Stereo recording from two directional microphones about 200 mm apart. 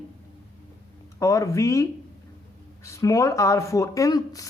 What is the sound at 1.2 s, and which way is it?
Speech, 15° left (ahead or behind).